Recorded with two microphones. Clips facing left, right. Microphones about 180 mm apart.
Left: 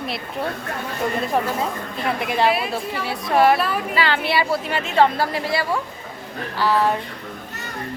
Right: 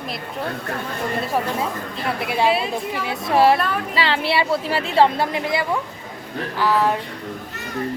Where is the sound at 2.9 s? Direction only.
25° right (ahead or behind).